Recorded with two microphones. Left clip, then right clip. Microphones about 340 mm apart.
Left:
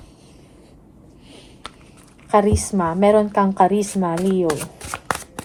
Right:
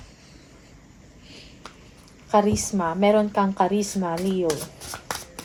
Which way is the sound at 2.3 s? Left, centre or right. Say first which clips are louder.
Left 4 dB; left.